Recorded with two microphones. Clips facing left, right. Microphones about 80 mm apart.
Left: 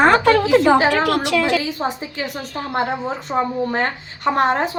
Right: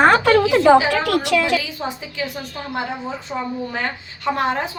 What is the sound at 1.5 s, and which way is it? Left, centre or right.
Speech, left.